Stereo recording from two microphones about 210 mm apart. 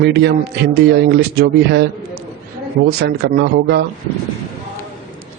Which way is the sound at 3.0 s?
50° right (ahead or behind).